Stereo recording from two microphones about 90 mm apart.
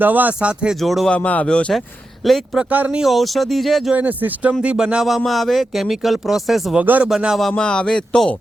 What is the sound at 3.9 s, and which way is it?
Speech, 20° right (ahead or behind).